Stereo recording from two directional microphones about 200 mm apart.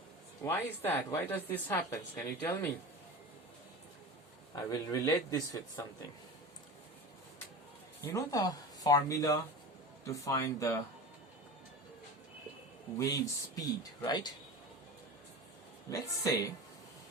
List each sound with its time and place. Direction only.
0.4 s speech: 10° left (ahead or behind)
4.5 s speech: 15° left (ahead or behind)
8.1 s speech: 15° left (ahead or behind)
13.0 s speech: 15° left (ahead or behind)
15.9 s speech: 15° left (ahead or behind)